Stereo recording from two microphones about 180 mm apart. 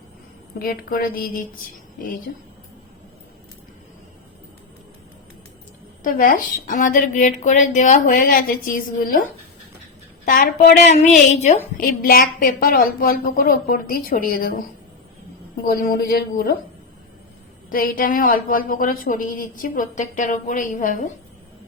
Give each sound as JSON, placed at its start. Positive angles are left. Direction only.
{"t": 0.6, "sound": "a woman's voice", "side_deg": 55}
{"t": 6.0, "sound": "a woman's voice", "side_deg": 50}
{"t": 10.2, "sound": "a woman's voice", "side_deg": 50}
{"t": 15.6, "sound": "speech", "side_deg": 55}
{"t": 17.7, "sound": "a woman's voice", "side_deg": 50}